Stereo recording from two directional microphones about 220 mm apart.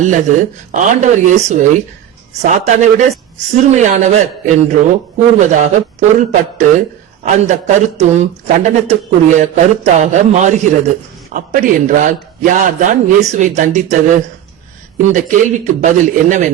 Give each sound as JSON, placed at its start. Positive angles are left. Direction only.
{"t": 0.0, "sound": "speech", "side_deg": -35}